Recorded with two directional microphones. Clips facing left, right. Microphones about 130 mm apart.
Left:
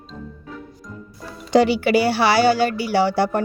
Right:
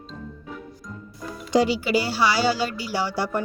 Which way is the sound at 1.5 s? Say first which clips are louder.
Left 5 dB; 65° left (ahead or behind).